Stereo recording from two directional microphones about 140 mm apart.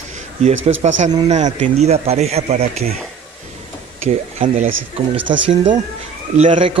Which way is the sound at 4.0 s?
55° right (ahead or behind).